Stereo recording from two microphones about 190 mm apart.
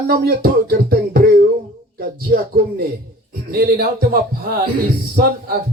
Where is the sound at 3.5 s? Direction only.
50° right (ahead or behind).